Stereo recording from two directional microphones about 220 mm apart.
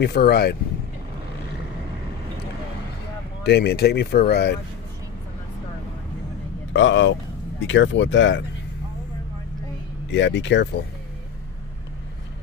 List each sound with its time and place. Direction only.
0.0 s speech: 45° left (ahead or behind)
3.4 s speech: 45° left (ahead or behind)
6.7 s speech: 60° left (ahead or behind)
10.1 s speech: 55° left (ahead or behind)